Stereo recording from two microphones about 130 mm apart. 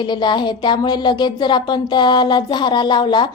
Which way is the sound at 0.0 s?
35° left (ahead or behind).